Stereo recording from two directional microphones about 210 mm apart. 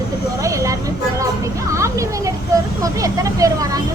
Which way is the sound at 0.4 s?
15° right (ahead or behind).